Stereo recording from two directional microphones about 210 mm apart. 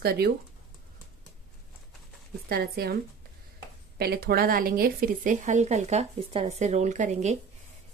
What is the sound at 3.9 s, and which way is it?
Speech, 50° right (ahead or behind).